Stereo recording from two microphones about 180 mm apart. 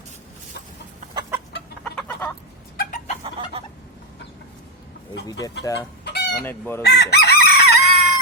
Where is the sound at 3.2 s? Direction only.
35° right (ahead or behind).